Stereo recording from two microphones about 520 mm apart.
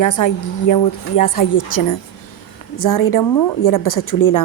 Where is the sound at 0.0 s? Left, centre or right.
Left.